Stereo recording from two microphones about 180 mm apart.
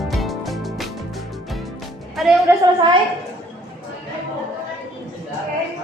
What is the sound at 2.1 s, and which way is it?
Music, centre (ahead or behind).